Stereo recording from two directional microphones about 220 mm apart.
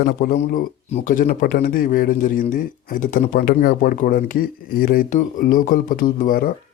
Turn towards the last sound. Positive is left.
turn(degrees=40)  # may be behind; listen again after turning